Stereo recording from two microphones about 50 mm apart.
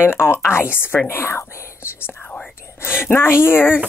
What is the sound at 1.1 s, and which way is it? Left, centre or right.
Speech, left.